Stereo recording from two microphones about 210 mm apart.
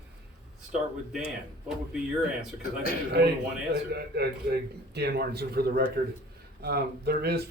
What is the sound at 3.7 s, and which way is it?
A man's voice, 50° right (ahead or behind).